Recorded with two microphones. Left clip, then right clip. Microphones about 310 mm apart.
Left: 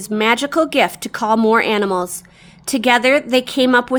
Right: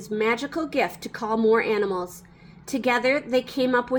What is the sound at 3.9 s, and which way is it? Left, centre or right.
Speech, left.